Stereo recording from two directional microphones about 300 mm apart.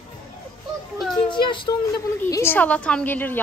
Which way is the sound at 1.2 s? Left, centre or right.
Centre.